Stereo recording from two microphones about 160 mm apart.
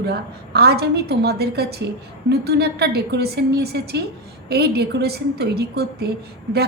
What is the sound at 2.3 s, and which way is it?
A woman's voice, 90° right.